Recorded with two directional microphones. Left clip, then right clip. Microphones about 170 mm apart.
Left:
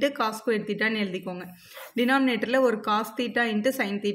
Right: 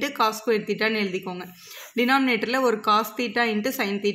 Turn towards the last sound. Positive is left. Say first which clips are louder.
# right 1 dB
turn(degrees=-40)  # may be behind; listen again after turning